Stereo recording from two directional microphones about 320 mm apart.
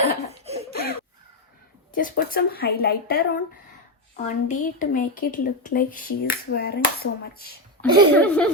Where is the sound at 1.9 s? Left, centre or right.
Left.